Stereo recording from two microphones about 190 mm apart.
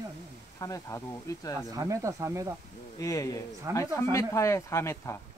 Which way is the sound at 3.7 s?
15° right (ahead or behind).